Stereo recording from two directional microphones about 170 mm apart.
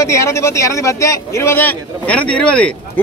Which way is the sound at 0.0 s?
15° left (ahead or behind).